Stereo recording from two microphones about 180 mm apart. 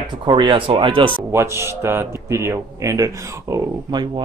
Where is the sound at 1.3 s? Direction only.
15° right (ahead or behind).